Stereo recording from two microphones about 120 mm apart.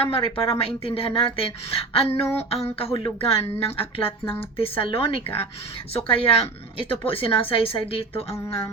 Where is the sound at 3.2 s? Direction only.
55° left (ahead or behind).